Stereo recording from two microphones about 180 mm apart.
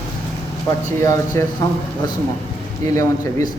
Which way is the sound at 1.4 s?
15° left (ahead or behind).